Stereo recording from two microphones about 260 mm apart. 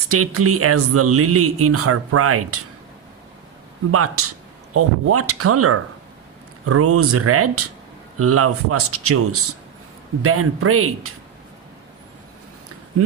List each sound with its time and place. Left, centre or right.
0.1 s speech: right
3.9 s speech: right